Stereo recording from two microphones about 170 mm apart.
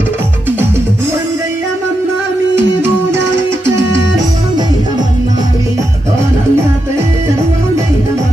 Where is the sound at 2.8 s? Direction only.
15° right (ahead or behind).